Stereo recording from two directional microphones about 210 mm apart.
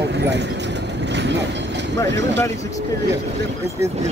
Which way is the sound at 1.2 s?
55° right (ahead or behind).